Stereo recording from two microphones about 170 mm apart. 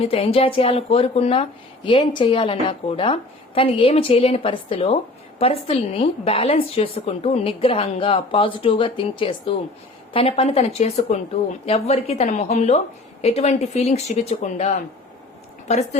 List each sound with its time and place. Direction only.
0.0 s speech: 35° left (ahead or behind)